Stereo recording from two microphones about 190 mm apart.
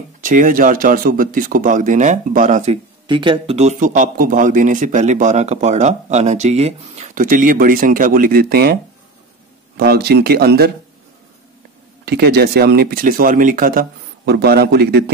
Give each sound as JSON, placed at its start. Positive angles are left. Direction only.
{"t": 0.2, "sound": "speech", "side_deg": -45}
{"t": 3.1, "sound": "speech", "side_deg": -25}
{"t": 9.8, "sound": "speech", "side_deg": -55}
{"t": 12.0, "sound": "speech", "side_deg": -55}